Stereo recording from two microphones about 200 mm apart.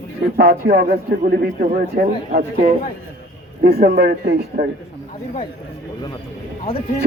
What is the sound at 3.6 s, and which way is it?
Speech, 50° right (ahead or behind).